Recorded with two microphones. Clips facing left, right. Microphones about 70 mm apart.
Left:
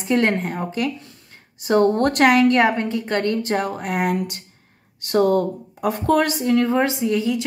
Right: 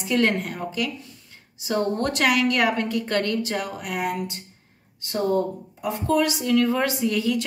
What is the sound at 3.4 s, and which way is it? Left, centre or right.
A woman's voice, left.